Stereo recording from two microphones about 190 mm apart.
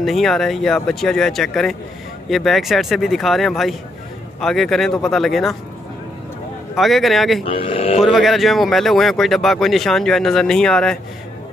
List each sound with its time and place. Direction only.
0.0 s speech: centre (ahead or behind)
6.7 s speech: centre (ahead or behind)
7.4 s speech: 30° left (ahead or behind)
8.0 s speech: centre (ahead or behind)